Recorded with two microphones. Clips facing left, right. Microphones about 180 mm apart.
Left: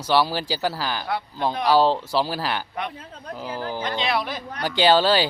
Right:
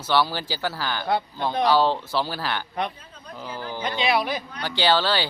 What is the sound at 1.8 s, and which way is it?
Speech, 35° left (ahead or behind).